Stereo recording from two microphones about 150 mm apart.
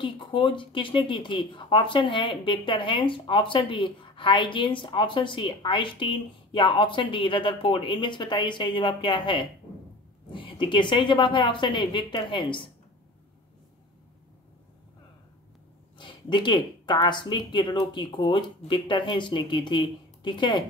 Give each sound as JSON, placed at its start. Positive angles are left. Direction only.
{"t": 0.0, "sound": "speech", "side_deg": 35}
{"t": 16.0, "sound": "speech", "side_deg": 30}